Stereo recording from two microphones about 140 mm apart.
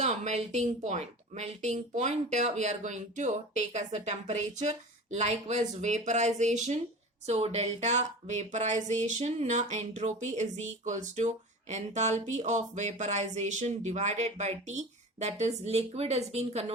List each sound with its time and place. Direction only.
0.0 s speech: 55° right (ahead or behind)